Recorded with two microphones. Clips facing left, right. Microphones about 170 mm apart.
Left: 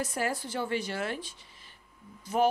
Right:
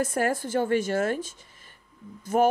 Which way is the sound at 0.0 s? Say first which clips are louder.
Right 6 dB; 50° right (ahead or behind).